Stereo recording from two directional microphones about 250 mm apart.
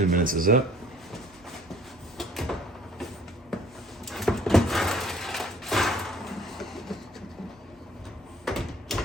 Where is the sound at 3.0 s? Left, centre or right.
Centre.